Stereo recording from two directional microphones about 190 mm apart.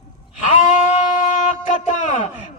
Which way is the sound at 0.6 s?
40° left (ahead or behind).